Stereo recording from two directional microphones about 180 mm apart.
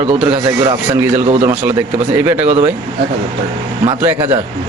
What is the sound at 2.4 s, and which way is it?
Speech, 35° right (ahead or behind).